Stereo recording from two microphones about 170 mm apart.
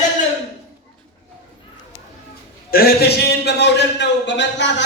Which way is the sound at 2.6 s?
65° left (ahead or behind).